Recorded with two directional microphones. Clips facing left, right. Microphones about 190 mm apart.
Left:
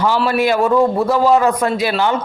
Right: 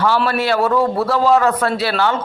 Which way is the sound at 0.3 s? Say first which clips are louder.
Left 2 dB; 15° left (ahead or behind).